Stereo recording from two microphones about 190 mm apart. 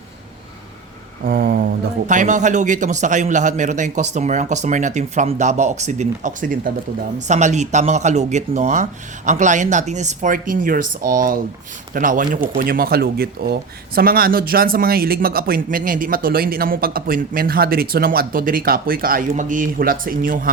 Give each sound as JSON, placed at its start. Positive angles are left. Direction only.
{"t": 1.2, "sound": "a man's voice", "side_deg": -50}